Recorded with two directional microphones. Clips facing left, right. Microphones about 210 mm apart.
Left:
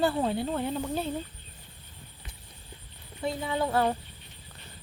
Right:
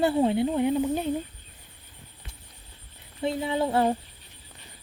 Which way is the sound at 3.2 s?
25° right (ahead or behind).